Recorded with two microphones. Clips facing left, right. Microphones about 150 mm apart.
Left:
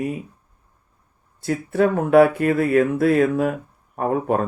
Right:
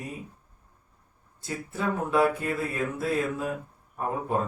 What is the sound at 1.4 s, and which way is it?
Speech, 70° left (ahead or behind).